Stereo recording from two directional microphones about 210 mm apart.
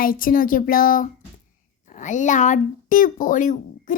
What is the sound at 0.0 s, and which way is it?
A woman's voice, 40° left (ahead or behind).